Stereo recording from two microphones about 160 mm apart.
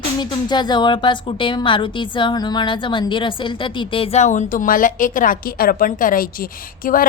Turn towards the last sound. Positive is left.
turn(degrees=60)  # may be behind; listen again after turning